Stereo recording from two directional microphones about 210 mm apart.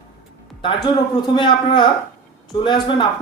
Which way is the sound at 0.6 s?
25° left (ahead or behind).